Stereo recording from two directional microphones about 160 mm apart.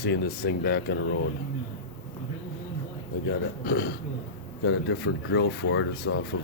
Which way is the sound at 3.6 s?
70° left (ahead or behind).